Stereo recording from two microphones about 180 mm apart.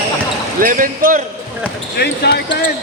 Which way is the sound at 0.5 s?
50° right (ahead or behind).